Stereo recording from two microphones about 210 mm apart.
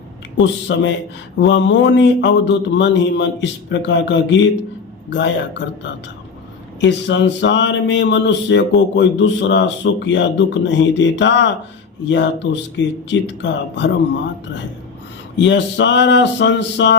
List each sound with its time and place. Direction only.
0.3 s speech: 60° left (ahead or behind)
15.4 s speech: 60° left (ahead or behind)